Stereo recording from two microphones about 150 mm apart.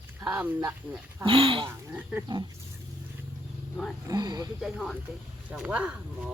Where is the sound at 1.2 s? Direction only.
35° right (ahead or behind).